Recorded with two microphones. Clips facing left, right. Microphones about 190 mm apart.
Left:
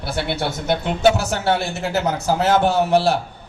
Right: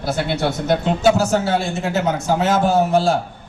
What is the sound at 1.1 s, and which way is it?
A man's voice, 65° left (ahead or behind).